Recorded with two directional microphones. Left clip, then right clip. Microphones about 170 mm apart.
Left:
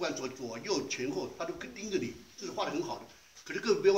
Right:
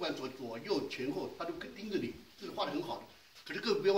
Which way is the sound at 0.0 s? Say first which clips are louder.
Left 3 dB; 5° right (ahead or behind).